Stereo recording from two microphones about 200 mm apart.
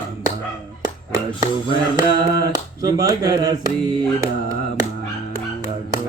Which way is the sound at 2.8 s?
15° right (ahead or behind).